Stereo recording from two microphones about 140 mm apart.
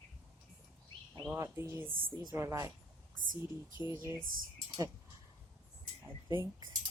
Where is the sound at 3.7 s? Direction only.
35° left (ahead or behind).